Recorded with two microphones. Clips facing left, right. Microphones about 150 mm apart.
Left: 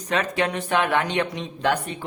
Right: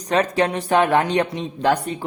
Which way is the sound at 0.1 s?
35° right (ahead or behind).